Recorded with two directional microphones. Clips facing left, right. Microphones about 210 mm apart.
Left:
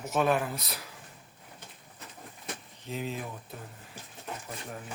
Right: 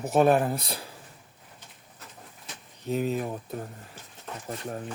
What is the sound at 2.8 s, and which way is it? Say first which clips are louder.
Speech: right 8 dB; 45° right (ahead or behind).